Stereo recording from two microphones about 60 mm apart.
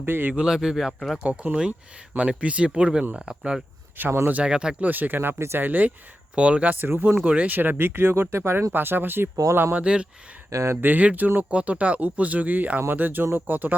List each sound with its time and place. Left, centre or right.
0.0 s speech: right
0.3 s a man's voice: centre
1.2 s speech: right
4.0 s speech: right
4.3 s a man's voice: centre
4.9 s speech: right
6.3 s speech: centre
6.7 s speech: right
7.3 s speech: right
9.3 s speech: right
9.7 s a man's voice: centre
10.5 s speech: right
10.8 s speech: right